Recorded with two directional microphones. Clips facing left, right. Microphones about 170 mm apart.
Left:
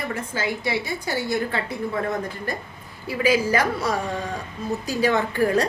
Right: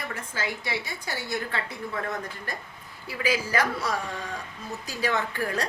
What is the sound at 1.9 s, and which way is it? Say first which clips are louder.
A woman's voice: left 5 dB; 30° left (ahead or behind).